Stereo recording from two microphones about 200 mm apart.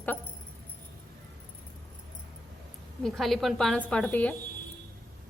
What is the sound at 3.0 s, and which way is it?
A woman's voice, centre (ahead or behind).